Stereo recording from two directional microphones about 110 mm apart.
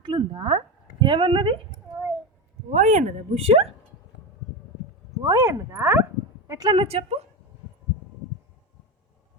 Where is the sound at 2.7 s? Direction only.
90° right; by 3.7 s 65° right (ahead or behind).